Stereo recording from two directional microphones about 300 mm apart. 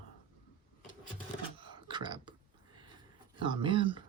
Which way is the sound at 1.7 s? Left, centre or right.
Centre.